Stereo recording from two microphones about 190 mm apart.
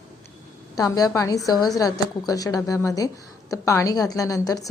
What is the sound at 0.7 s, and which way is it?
Speech, 20° left (ahead or behind).